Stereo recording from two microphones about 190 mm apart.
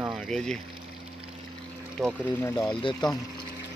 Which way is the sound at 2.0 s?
10° left (ahead or behind).